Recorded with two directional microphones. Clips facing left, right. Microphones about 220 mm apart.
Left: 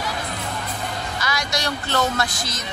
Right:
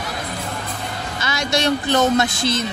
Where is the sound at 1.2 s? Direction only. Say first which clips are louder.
Right 6 dB; 25° right (ahead or behind).